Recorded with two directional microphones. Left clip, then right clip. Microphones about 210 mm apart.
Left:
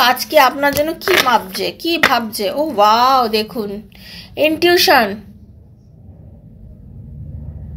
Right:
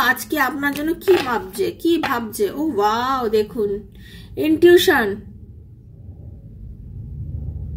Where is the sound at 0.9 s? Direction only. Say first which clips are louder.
Left 2 dB; 20° right (ahead or behind).